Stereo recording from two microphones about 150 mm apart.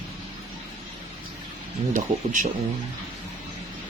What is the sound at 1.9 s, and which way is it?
Speech, 60° right (ahead or behind).